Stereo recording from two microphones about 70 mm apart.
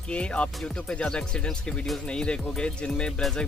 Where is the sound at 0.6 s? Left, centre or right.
Centre.